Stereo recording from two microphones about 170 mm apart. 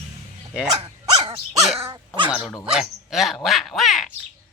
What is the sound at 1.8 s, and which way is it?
Speech, 30° right (ahead or behind).